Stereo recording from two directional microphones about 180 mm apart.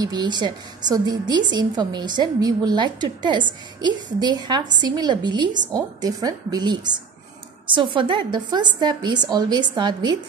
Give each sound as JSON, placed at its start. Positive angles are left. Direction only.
{"t": 0.0, "sound": "a woman's voice", "side_deg": -25}